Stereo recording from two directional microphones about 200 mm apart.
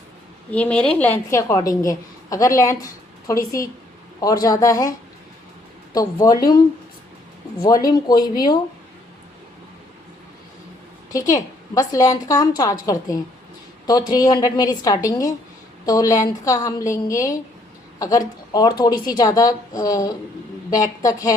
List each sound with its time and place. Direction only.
0.5 s a woman's voice: 5° left (ahead or behind)
7.6 s a woman's voice: 20° left (ahead or behind)
11.1 s a woman's voice: 15° left (ahead or behind)